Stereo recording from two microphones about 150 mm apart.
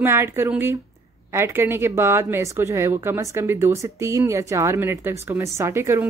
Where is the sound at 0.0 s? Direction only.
15° right (ahead or behind).